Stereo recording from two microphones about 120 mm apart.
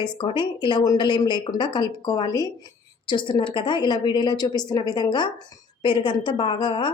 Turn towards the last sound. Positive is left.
turn(degrees=40)  # may be behind; listen again after turning